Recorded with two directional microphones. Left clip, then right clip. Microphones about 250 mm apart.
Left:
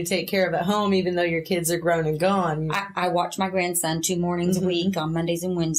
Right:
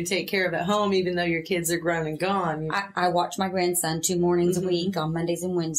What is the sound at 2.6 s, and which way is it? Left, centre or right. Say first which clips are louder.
Speech: even; right.